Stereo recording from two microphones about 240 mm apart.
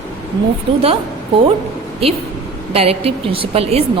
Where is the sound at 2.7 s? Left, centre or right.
Right.